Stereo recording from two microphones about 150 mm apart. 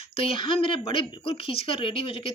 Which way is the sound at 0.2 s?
35° left (ahead or behind).